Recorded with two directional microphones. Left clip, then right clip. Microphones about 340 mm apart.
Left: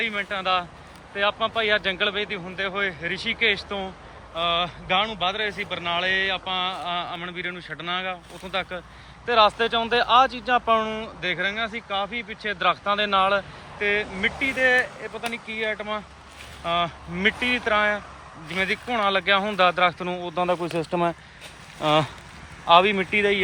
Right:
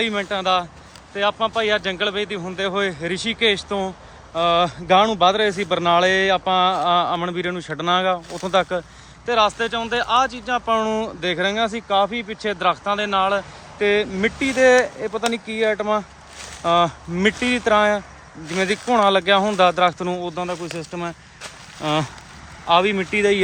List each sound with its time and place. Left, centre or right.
0.0 s speech: centre
14.2 s speech: right
15.7 s speech: centre